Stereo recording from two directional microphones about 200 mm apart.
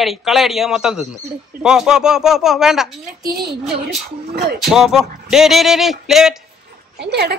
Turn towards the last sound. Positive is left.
turn(degrees=-55)  # may be behind; listen again after turning